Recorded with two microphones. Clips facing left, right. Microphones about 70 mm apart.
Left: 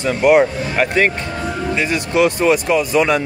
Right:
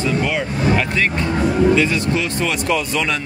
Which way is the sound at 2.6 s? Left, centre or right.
Centre.